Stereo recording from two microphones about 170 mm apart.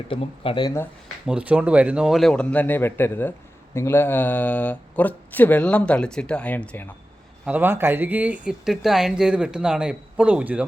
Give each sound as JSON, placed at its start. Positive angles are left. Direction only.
{"t": 0.1, "sound": "speech", "side_deg": 30}
{"t": 1.0, "sound": "speech", "side_deg": -5}
{"t": 7.4, "sound": "speech", "side_deg": -10}